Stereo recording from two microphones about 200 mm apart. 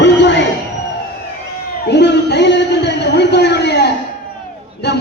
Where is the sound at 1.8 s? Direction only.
60° left (ahead or behind).